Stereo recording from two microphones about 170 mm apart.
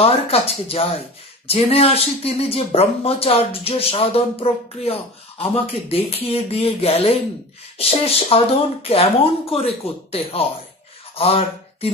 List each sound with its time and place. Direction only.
0.0 s speech: 35° left (ahead or behind)